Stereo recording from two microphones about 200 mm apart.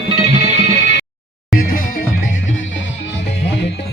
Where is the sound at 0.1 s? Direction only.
35° right (ahead or behind).